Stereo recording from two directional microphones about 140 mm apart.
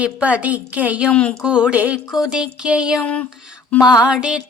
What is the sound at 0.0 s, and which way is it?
Speech, 10° right (ahead or behind).